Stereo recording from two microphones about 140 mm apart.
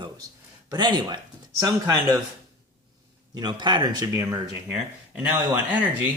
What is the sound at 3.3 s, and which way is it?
Speech, 30° right (ahead or behind).